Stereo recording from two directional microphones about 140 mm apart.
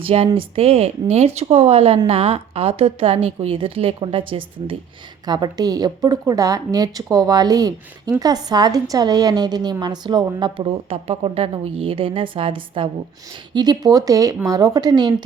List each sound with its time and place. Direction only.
0.0 s a woman's voice: 45° right (ahead or behind)